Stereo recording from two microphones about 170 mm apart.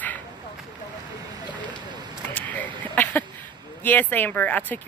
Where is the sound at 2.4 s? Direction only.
10° left (ahead or behind).